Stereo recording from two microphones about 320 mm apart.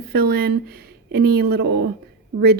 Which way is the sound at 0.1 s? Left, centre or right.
Right.